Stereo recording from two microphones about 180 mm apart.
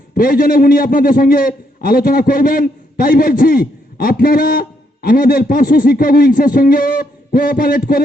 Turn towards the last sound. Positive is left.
turn(degrees=55)  # may be behind; listen again after turning